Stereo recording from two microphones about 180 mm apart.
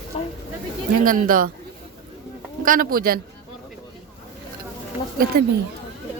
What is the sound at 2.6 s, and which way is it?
Speech, 50° right (ahead or behind).